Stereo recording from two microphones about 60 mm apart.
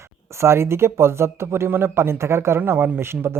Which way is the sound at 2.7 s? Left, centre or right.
Right.